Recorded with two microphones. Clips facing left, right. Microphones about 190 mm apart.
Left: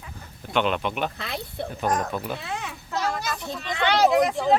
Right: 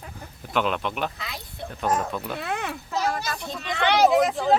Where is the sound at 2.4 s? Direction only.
60° right (ahead or behind).